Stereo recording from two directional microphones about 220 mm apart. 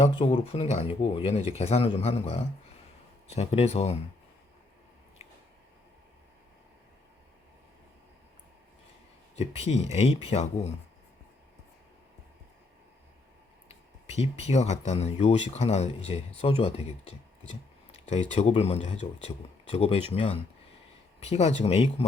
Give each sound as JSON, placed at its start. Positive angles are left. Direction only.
{"t": 0.2, "sound": "speech", "side_deg": 25}
{"t": 9.3, "sound": "speech", "side_deg": 30}
{"t": 14.1, "sound": "speech", "side_deg": 30}